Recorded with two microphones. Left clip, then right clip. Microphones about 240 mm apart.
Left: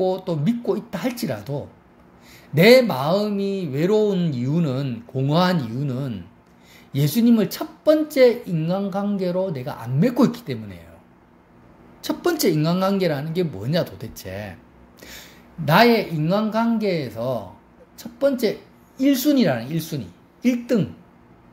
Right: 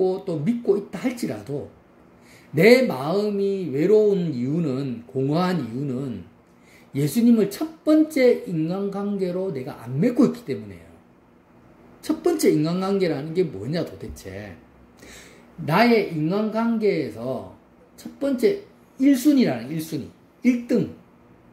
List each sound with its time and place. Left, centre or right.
0.0 s speech: left
2.5 s speech: left
12.0 s speech: left
15.6 s speech: left
18.9 s speech: left